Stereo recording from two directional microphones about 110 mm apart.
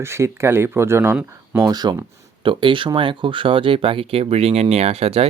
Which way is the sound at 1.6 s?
40° right (ahead or behind).